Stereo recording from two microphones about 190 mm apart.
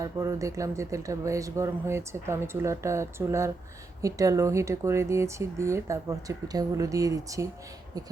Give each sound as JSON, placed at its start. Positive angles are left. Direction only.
{"t": 0.0, "sound": "speech", "side_deg": -15}